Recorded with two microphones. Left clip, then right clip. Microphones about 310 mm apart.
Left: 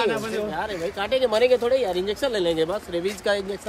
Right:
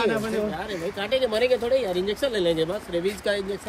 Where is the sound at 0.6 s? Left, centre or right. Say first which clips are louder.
Left 3 dB; centre.